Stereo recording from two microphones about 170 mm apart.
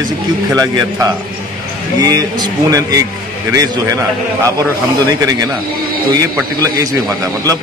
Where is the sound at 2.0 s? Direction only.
20° right (ahead or behind).